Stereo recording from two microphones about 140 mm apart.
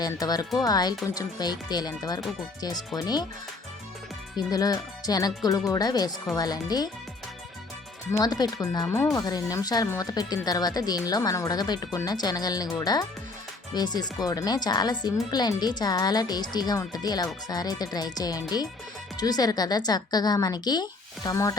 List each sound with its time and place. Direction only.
0.0 s speech: 30° left (ahead or behind)
4.4 s speech: 30° left (ahead or behind)
8.1 s speech: 25° left (ahead or behind)